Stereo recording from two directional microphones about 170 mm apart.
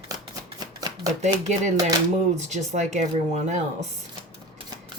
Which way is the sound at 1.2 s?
45° right (ahead or behind).